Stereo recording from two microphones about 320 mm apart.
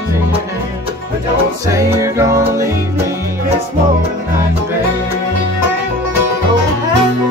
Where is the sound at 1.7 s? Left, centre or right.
Centre.